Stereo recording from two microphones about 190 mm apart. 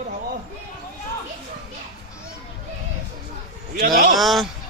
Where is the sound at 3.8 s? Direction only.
45° right (ahead or behind).